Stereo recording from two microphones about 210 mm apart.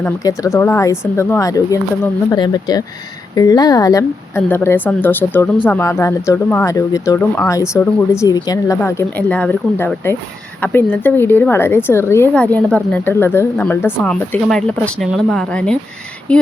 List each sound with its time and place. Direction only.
0.0 s a woman's voice: 15° left (ahead or behind)